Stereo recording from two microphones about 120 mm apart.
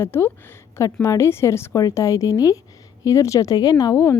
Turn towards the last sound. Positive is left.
turn(degrees=25)  # may be behind; listen again after turning